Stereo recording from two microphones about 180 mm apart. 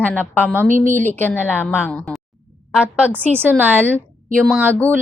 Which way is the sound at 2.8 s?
10° right (ahead or behind).